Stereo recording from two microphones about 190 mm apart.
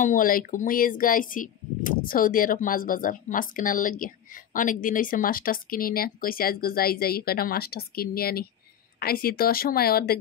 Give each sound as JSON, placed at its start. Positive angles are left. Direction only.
{"t": 0.0, "sound": "speech", "side_deg": 45}